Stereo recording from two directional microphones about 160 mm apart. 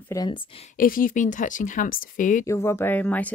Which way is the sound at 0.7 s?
60° left (ahead or behind).